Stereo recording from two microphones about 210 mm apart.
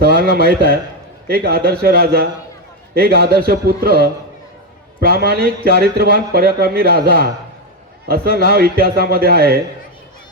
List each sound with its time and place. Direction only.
0.2 s a man's voice: 45° right (ahead or behind)
4.9 s a man's voice: 45° right (ahead or behind)